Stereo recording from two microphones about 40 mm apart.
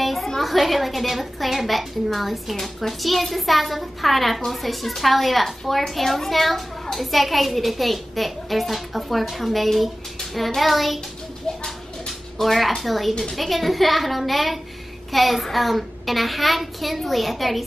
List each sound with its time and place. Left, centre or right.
0.0 s a sound: centre
0.4 s a woman's voice: centre
12.4 s a woman's voice: centre